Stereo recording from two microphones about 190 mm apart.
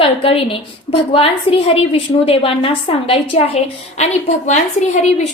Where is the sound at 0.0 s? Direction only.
30° left (ahead or behind).